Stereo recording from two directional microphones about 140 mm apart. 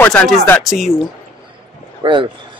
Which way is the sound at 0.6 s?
Centre (ahead or behind).